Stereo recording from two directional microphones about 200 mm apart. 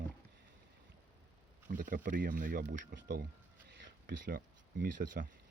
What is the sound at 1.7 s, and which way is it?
Speech, 40° right (ahead or behind).